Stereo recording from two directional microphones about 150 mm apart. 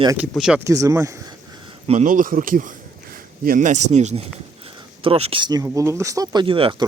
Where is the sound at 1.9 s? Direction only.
55° right (ahead or behind); by 6.8 s 35° right (ahead or behind).